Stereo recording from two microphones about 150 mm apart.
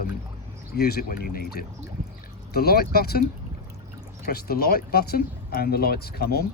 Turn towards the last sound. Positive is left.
turn(degrees=90)